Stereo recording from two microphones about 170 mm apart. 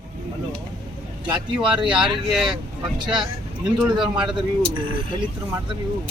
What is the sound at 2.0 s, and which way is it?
Speech, centre (ahead or behind).